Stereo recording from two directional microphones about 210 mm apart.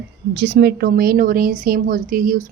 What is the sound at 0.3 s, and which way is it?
Speech, 50° right (ahead or behind).